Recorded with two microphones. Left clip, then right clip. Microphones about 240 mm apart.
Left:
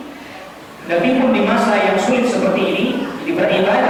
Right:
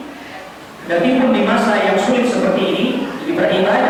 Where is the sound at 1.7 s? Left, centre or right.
Right.